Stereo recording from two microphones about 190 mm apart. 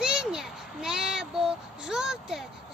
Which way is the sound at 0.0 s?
5° right (ahead or behind).